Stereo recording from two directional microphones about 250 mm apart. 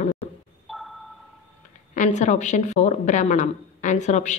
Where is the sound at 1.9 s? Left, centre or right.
Left.